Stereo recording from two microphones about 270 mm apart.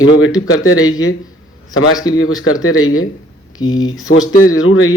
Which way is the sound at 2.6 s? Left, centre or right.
Left.